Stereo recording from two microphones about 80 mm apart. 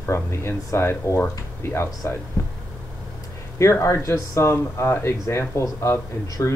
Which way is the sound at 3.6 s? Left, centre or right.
Left.